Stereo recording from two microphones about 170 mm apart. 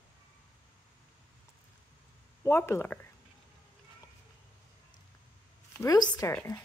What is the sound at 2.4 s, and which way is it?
Speech, 15° left (ahead or behind).